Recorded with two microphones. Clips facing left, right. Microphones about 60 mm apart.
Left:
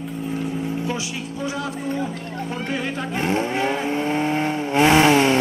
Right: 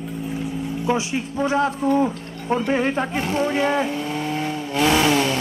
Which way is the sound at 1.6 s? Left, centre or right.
Right.